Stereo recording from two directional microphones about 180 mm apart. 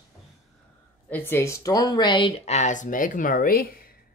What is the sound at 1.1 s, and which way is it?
Speech, 10° left (ahead or behind).